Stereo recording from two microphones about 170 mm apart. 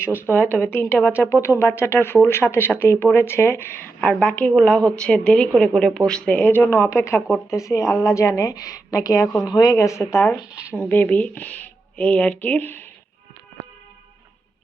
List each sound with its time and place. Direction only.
0.0 s speech: 10° right (ahead or behind)
0.5 s a woman's voice: 10° left (ahead or behind)